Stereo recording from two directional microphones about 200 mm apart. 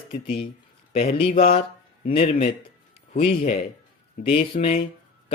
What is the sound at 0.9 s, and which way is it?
Speech, 30° left (ahead or behind).